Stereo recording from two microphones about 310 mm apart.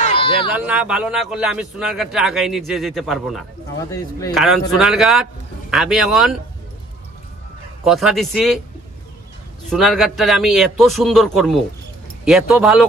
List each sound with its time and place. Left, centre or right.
0.0 s a sound: centre
0.5 s a man's voice: centre
3.9 s speech: centre
4.4 s a man's voice: centre
7.8 s a man's voice: centre
9.7 s a man's voice: centre